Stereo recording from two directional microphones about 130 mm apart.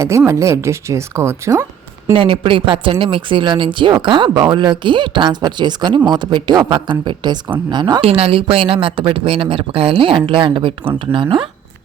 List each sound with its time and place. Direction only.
0.3 s speech: 25° right (ahead or behind)
2.1 s speech: 45° right (ahead or behind)
8.0 s speech: 45° right (ahead or behind)